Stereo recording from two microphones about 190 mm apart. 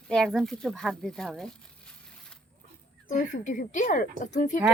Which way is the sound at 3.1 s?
40° left (ahead or behind).